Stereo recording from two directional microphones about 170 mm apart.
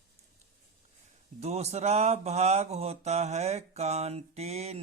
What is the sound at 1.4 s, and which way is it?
Mantra, 40° right (ahead or behind).